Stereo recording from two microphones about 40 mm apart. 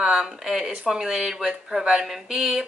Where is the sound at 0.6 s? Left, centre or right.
Right.